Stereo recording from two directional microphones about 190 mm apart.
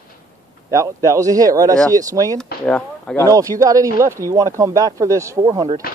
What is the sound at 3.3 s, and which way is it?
Speech, 20° right (ahead or behind).